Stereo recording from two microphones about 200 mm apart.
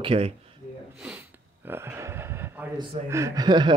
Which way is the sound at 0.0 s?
30° right (ahead or behind).